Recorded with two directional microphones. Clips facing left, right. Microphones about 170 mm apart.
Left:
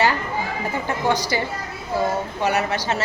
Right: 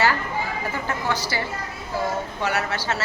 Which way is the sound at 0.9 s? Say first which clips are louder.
Left 7 dB; 20° left (ahead or behind).